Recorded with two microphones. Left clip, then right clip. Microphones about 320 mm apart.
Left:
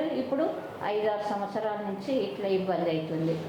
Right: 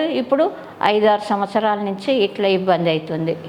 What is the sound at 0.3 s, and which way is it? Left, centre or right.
A woman's voice, right.